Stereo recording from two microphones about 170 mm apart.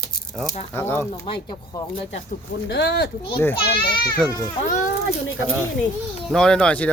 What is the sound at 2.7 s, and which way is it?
Speech, 80° left.